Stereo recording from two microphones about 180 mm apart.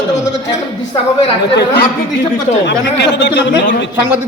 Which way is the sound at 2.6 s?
75° left (ahead or behind).